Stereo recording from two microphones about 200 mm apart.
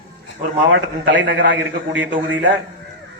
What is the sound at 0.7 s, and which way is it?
Speech, 70° right (ahead or behind).